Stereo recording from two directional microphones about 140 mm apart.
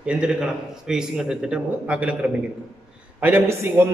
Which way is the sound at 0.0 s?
5° right (ahead or behind).